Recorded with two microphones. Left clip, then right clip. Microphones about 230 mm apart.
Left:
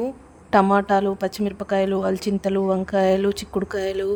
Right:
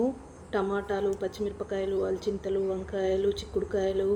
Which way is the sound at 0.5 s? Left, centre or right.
Left.